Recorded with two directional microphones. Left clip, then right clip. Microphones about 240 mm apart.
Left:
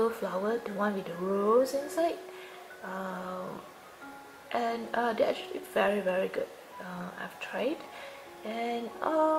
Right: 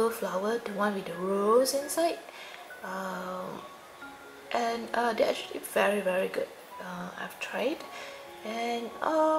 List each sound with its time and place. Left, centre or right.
0.0 s speech: centre
0.8 s a woman's voice: centre
2.8 s speech: centre
4.5 s a woman's voice: centre
9.0 s speech: centre